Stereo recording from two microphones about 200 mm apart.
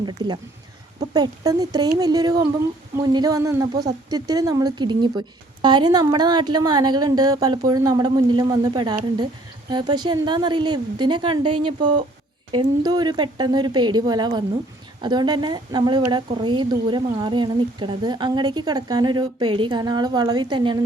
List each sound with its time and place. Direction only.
0.2 s a woman's voice: 25° right (ahead or behind)